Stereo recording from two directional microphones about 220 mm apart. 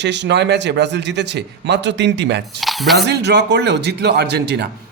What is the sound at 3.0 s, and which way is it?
A man's voice, 50° right (ahead or behind).